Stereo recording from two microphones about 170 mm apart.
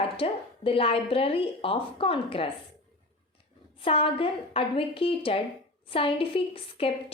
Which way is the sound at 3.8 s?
35° left (ahead or behind).